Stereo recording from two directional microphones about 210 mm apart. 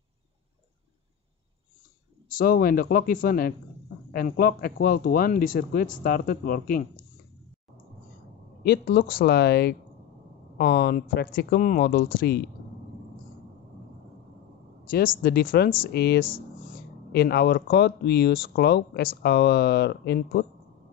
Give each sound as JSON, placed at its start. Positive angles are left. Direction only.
{"t": 2.3, "sound": "speech", "side_deg": 45}
{"t": 8.6, "sound": "speech", "side_deg": 45}
{"t": 14.9, "sound": "speech", "side_deg": 45}